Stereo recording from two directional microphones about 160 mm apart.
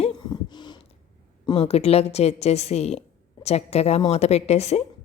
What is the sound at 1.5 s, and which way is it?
A woman's voice, 40° left (ahead or behind).